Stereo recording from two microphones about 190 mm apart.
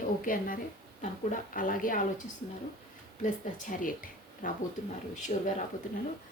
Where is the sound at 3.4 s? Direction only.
45° left (ahead or behind).